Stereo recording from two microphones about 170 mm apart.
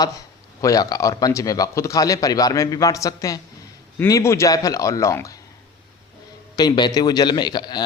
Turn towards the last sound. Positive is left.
turn(degrees=25)  # may be behind; listen again after turning